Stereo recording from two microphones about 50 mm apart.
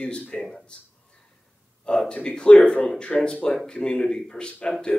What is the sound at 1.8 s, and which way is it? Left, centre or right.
Speech, centre.